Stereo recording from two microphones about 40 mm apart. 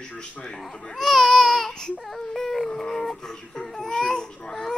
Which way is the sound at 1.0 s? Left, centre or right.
Centre.